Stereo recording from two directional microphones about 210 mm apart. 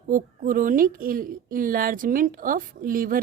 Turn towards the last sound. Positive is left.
turn(degrees=-40)  # may be behind; listen again after turning